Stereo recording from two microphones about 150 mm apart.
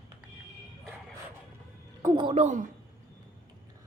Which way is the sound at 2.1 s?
40° right (ahead or behind).